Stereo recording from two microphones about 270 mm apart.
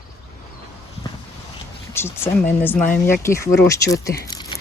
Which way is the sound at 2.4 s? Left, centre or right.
Left.